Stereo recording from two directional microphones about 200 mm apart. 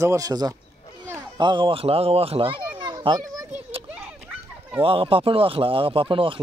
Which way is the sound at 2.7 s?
25° right (ahead or behind).